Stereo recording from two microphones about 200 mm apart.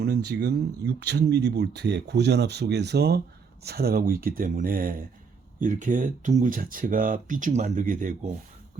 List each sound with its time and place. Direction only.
0.0 s speech: 55° right (ahead or behind)